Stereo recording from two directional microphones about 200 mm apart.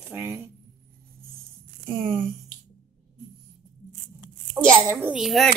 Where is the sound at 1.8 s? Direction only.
35° right (ahead or behind).